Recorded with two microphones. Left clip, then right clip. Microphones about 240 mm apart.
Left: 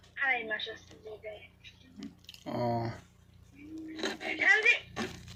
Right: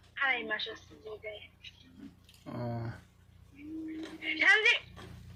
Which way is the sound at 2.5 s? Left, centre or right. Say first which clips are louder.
Left 8 dB; right.